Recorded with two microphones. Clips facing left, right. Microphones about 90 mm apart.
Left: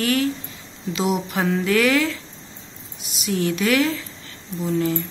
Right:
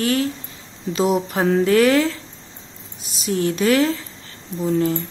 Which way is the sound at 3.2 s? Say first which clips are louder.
Right 3 dB; 35° right (ahead or behind).